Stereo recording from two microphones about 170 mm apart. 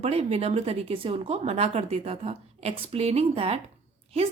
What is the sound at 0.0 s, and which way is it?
A woman's voice, 35° right (ahead or behind).